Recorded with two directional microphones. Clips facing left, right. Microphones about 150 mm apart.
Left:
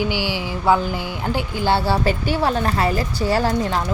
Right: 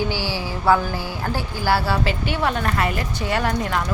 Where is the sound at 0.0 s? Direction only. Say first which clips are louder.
Left 2 dB; 15° left (ahead or behind).